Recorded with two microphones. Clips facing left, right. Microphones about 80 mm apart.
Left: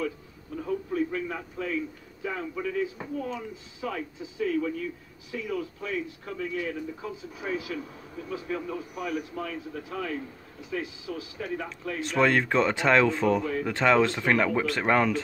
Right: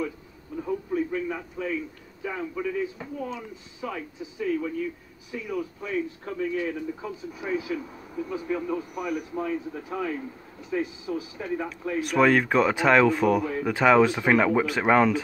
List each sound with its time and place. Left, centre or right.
0.6 s radio: centre
2.2 s speech: centre
5.9 s speech: right; by 9.2 s centre
9.3 s speech: right
12.0 s speech: centre